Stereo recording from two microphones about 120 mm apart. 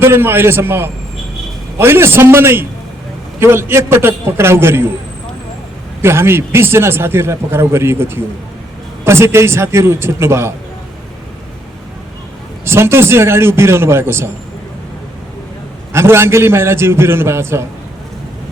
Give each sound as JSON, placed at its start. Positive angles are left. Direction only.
{"t": 0.0, "sound": "a man's voice", "side_deg": -20}
{"t": 6.0, "sound": "a man's voice", "side_deg": -20}
{"t": 12.6, "sound": "a man's voice", "side_deg": -20}
{"t": 15.9, "sound": "a man's voice", "side_deg": -20}